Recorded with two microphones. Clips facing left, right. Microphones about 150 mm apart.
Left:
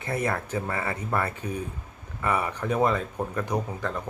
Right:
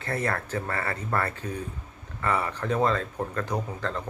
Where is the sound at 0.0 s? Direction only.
15° left (ahead or behind).